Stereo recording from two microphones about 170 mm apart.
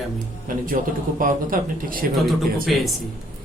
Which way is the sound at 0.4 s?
50° right (ahead or behind).